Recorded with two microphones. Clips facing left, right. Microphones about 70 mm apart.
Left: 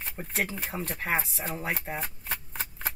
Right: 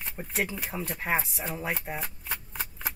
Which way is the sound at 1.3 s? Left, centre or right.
Centre.